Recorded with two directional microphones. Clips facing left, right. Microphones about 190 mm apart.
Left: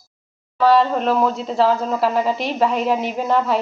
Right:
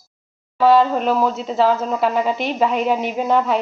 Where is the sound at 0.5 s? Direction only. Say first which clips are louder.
Right 1 dB; centre (ahead or behind).